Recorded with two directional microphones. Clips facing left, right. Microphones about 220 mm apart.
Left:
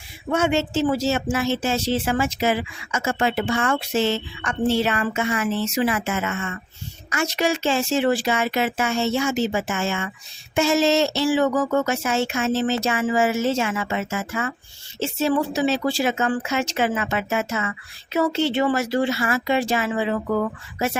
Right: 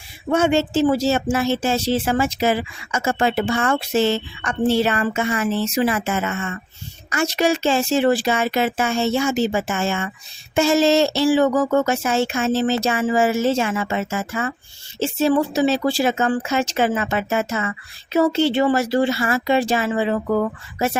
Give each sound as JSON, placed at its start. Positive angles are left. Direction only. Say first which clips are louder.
{"t": 0.3, "sound": "speech", "louder": "right 3 dB", "side_deg": -35}